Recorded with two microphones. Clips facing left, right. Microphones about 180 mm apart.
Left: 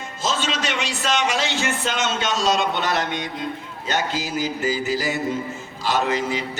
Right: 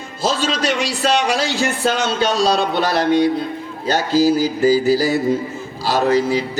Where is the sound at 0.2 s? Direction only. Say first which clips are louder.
Right 6 dB; 35° right (ahead or behind).